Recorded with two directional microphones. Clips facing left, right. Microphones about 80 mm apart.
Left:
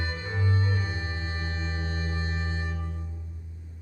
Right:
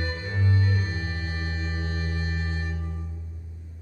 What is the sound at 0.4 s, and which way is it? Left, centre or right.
Music, left.